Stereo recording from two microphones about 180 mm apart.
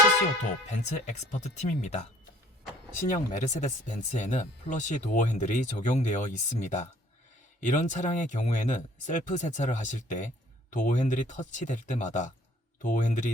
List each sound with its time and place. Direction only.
0.7 s speech: 40° left (ahead or behind)
3.1 s speech: 45° left (ahead or behind)